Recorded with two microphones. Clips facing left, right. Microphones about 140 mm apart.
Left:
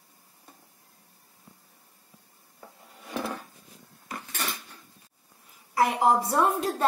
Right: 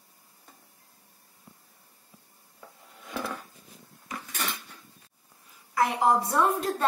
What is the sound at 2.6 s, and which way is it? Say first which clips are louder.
Drawer open or close: left 1 dB; 15° left (ahead or behind).